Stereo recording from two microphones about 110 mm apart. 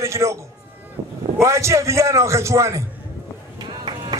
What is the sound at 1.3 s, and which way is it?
A man's voice, 25° right (ahead or behind).